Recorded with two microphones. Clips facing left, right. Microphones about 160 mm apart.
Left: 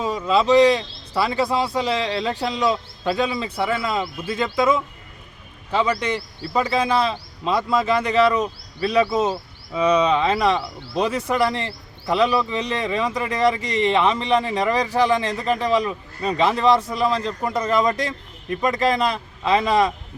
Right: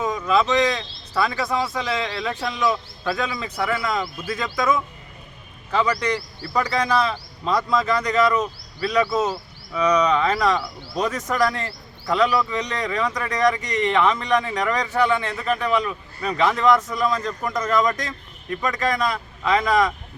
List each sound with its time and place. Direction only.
0.0 s speech: 30° left (ahead or behind)